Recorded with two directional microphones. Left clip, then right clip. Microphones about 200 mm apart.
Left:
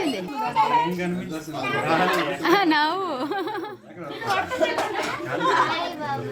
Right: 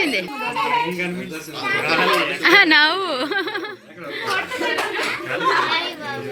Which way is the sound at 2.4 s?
10° left (ahead or behind).